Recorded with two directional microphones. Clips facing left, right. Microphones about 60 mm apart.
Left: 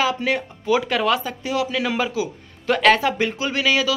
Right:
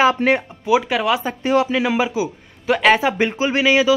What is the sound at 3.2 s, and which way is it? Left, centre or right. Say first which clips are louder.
Speech: right 4 dB; right.